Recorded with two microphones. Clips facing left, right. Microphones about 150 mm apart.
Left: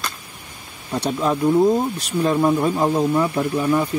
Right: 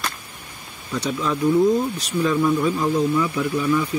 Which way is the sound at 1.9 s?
60° left (ahead or behind).